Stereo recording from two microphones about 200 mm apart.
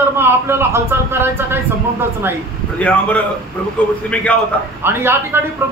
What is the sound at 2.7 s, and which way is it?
A man's voice, 5° left (ahead or behind).